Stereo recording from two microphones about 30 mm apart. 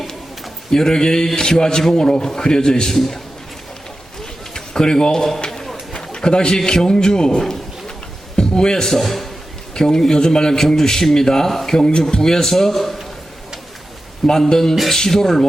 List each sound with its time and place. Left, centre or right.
0.7 s a man's voice: centre
2.9 s a man's voice: centre
4.5 s speech: left
5.9 s a sound: left
6.8 s a man's voice: left
9.0 s a man's voice: centre
9.7 s a man's voice: left
11.8 s a man's voice: left
12.2 s a man's voice: centre
14.3 s a man's voice: centre